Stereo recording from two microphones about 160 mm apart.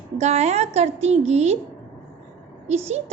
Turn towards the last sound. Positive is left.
turn(degrees=-45)  # may be behind; listen again after turning